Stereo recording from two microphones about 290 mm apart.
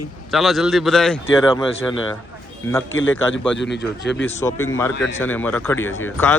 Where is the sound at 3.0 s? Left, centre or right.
Left.